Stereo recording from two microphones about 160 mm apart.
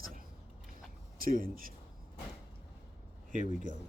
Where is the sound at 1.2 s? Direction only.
60° right (ahead or behind).